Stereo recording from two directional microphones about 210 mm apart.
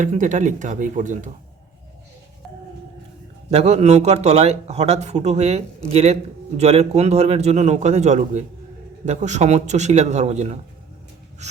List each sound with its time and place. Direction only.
0.0 s a man's voice: 35° right (ahead or behind)
3.5 s a man's voice: 30° right (ahead or behind)